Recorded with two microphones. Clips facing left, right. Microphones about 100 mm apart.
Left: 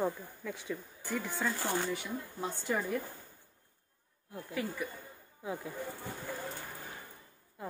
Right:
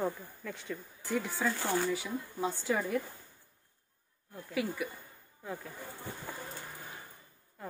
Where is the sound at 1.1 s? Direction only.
15° right (ahead or behind).